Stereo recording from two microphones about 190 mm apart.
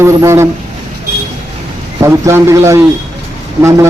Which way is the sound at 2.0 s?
15° right (ahead or behind).